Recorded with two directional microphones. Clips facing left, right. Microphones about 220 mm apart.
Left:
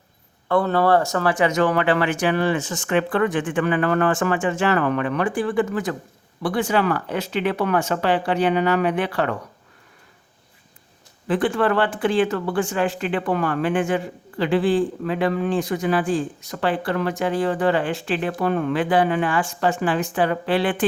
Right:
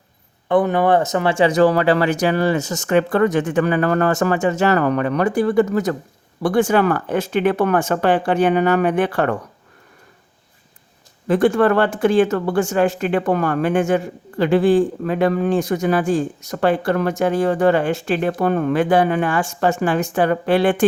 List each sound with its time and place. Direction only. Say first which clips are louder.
0.4 s speech: right 3 dB; 15° right (ahead or behind); by 9.4 s 50° right (ahead or behind)
11.3 s speech: right 5 dB; 45° right (ahead or behind)